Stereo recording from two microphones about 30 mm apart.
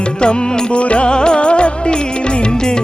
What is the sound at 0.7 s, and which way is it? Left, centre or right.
Music, left.